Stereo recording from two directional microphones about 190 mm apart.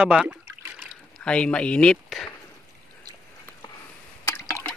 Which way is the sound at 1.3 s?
5° left (ahead or behind).